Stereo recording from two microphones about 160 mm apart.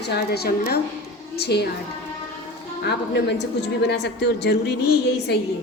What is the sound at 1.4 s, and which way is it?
Speech, 90° left.